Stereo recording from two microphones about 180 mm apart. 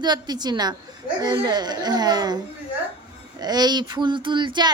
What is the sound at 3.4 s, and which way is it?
A child's voice, 20° right (ahead or behind).